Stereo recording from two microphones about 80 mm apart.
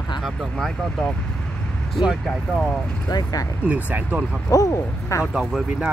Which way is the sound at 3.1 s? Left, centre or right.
Left.